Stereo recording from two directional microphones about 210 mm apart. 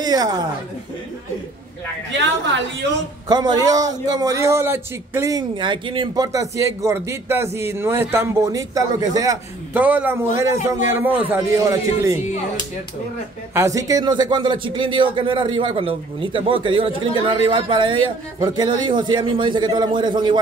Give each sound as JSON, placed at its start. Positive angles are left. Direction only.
{"t": 0.0, "sound": "a woman's voice", "side_deg": -20}
{"t": 3.3, "sound": "a man's voice", "side_deg": -20}
{"t": 13.6, "sound": "speech", "side_deg": -15}